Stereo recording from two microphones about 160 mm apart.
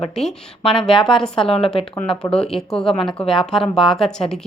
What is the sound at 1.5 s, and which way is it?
Speech, 35° left (ahead or behind).